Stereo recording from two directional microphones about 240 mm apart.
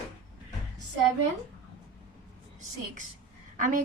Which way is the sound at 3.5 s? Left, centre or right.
Right.